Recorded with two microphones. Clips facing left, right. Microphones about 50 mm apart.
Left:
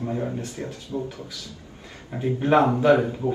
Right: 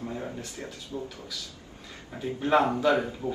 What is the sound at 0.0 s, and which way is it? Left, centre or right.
Speech, left.